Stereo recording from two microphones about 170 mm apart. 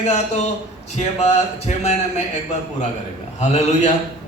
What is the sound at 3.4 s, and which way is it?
Speech, 45° left (ahead or behind).